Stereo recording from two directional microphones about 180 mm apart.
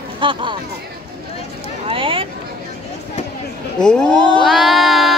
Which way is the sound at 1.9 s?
30° right (ahead or behind).